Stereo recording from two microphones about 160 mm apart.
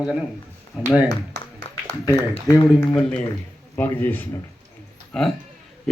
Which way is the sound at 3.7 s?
10° left (ahead or behind).